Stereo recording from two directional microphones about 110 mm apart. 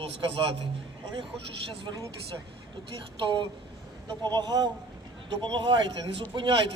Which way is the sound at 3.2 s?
45° right (ahead or behind).